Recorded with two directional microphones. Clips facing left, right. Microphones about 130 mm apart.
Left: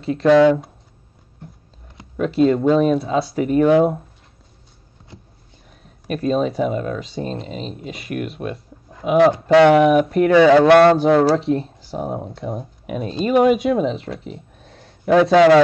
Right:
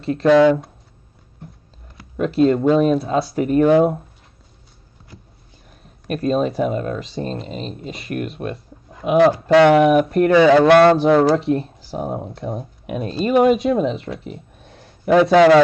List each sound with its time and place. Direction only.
0.0 s speech: centre (ahead or behind)
2.1 s speech: centre (ahead or behind)
5.1 s a sound: 25° left (ahead or behind)
5.7 s speech: centre (ahead or behind)